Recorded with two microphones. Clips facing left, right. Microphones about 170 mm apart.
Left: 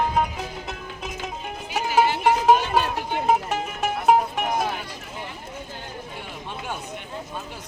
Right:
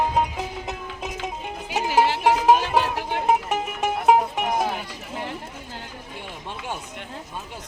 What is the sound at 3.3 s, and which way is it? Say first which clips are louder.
Music: even; 15° right (ahead or behind).